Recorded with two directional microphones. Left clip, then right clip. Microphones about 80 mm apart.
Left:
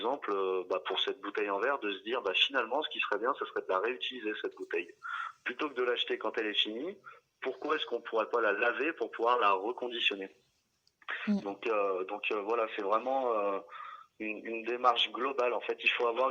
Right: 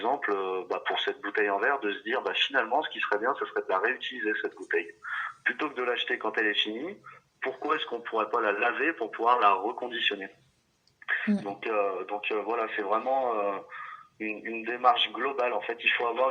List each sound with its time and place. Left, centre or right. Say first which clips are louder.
0.0 s speech: right 4 dB; centre; by 10.2 s left
11.0 s a sound: right 9 dB; left
11.3 s speech: right 3 dB; left